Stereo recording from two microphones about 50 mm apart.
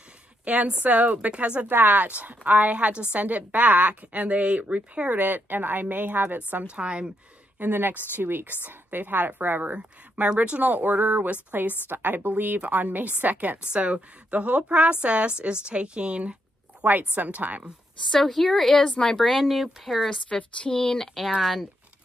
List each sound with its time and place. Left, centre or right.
0.5 s a woman's voice: right
1.7 s a woman's voice: right
5.1 s a woman's voice: right
6.7 s a woman's voice: right
7.5 s a woman's voice: right
17.1 s a woman's voice: right
18.1 s speech: centre
20.1 s a woman's voice: left
20.7 s speech: centre